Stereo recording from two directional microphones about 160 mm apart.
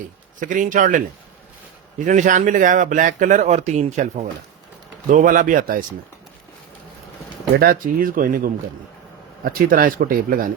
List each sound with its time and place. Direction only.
0.3 s speech: 55° right (ahead or behind)
5.0 s speech: 55° right (ahead or behind)
7.6 s speech: 65° right (ahead or behind)